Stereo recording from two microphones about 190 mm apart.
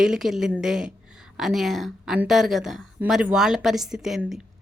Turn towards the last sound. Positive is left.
turn(degrees=-5)  # may be behind; listen again after turning